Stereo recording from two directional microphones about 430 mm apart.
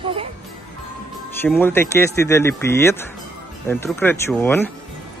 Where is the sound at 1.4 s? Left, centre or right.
Centre.